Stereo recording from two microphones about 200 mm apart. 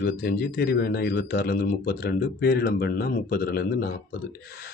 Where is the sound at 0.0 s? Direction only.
50° left (ahead or behind).